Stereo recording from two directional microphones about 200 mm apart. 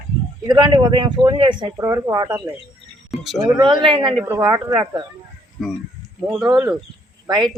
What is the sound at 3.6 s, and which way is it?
Speech, 25° right (ahead or behind).